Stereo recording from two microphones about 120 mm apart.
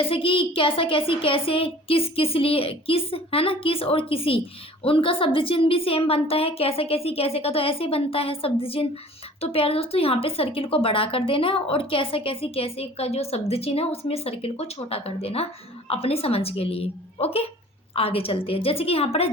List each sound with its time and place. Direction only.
0.0 s a woman's voice: 50° left (ahead or behind)